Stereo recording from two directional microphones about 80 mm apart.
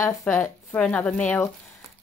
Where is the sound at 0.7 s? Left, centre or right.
Centre.